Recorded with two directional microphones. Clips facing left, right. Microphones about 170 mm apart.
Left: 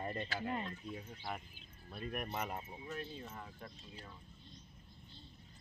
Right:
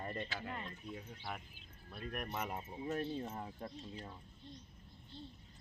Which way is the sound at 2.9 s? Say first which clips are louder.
Right 6 dB; 40° right (ahead or behind).